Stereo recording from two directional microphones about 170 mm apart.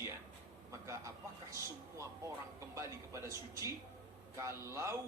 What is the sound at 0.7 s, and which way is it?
A man's voice, 15° right (ahead or behind).